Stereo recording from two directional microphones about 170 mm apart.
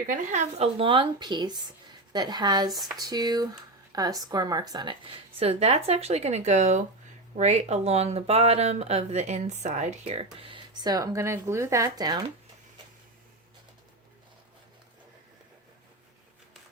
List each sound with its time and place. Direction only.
0.1 s speech: 50° right (ahead or behind); by 12.2 s 20° right (ahead or behind)